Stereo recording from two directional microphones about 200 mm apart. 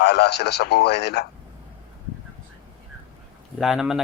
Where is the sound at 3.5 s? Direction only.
Centre (ahead or behind).